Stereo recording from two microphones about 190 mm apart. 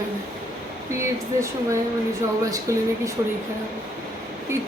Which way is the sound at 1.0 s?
15° right (ahead or behind).